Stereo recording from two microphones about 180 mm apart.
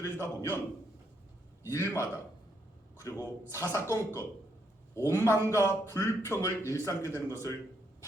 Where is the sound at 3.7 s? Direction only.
15° left (ahead or behind).